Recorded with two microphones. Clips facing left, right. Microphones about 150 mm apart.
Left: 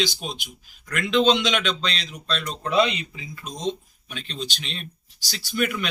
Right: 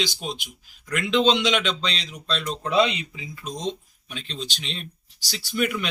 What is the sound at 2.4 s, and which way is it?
A man's voice, 10° right (ahead or behind).